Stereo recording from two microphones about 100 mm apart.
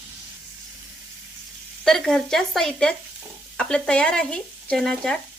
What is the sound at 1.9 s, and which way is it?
Speech, 5° left (ahead or behind).